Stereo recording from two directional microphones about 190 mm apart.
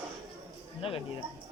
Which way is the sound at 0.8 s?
30° left (ahead or behind).